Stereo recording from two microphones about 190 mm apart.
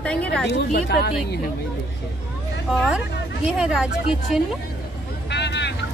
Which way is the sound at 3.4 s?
5° right (ahead or behind).